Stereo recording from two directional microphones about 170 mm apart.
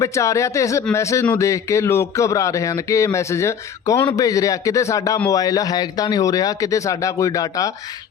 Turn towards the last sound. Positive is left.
turn(degrees=20)  # may be behind; listen again after turning